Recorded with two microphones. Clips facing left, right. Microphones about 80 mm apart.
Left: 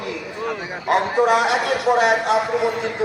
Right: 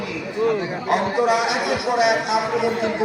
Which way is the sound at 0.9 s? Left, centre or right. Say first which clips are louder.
Left 2 dB; left.